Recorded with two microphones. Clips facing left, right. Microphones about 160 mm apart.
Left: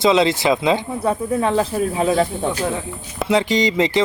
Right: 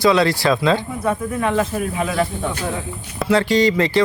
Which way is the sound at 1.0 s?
30° left (ahead or behind).